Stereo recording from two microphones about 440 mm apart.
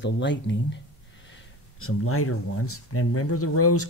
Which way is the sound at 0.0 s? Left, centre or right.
Left.